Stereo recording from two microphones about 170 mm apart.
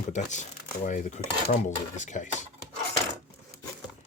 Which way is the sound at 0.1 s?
45° left (ahead or behind).